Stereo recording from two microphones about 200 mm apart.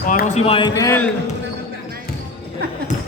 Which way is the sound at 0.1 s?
35° left (ahead or behind).